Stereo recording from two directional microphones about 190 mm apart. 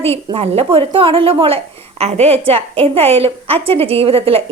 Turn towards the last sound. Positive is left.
turn(degrees=-30)  # may be behind; listen again after turning